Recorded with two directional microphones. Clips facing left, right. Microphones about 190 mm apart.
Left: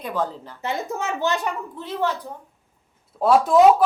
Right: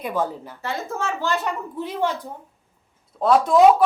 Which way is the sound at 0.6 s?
20° left (ahead or behind).